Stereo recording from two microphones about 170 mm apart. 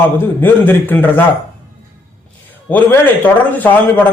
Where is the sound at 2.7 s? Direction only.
10° left (ahead or behind).